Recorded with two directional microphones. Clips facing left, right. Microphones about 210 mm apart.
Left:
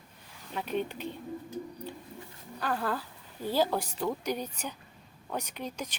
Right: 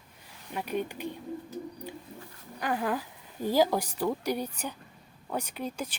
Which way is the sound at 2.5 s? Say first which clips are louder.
Right 2 dB; 15° right (ahead or behind).